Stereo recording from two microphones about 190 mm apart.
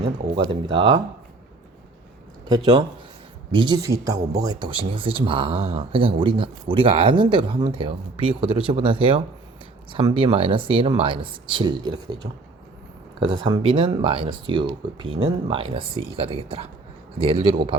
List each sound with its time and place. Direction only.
0.0 s speech: 25° right (ahead or behind)
3.5 s speech: 25° right (ahead or behind)